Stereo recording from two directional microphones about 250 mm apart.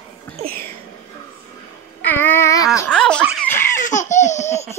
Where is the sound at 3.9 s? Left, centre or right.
Left.